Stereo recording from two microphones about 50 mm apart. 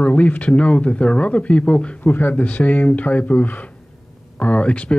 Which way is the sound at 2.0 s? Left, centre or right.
Left.